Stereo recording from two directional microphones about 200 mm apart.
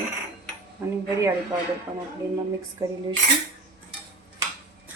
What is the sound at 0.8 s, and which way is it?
Speech, 5° right (ahead or behind).